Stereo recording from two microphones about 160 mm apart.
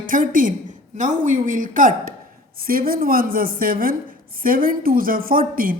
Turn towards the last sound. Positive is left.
turn(degrees=-60)  # may be behind; listen again after turning